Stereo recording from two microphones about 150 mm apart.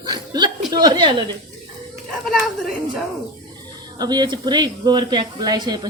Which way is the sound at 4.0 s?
30° right (ahead or behind).